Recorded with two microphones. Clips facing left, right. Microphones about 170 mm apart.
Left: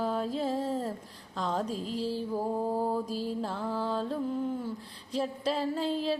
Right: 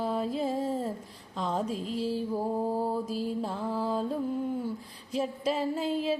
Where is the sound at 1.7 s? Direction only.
40° left (ahead or behind).